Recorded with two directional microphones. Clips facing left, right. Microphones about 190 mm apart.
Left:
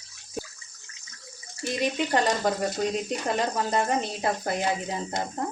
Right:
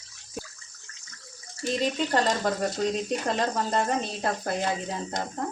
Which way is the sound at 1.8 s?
15° left (ahead or behind).